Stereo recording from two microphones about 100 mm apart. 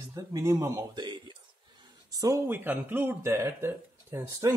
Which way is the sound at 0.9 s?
45° right (ahead or behind).